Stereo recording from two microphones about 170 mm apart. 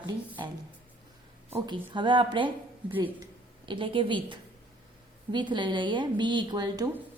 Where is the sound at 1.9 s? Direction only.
25° right (ahead or behind).